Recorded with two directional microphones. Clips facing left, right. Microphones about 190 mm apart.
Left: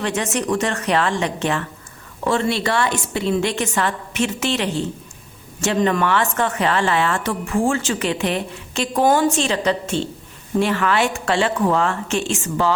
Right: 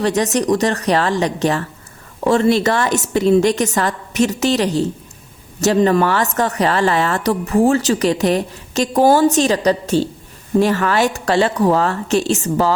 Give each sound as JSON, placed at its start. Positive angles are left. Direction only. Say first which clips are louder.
{"t": 0.0, "sound": "a woman's voice", "louder": "right 6 dB", "side_deg": -40}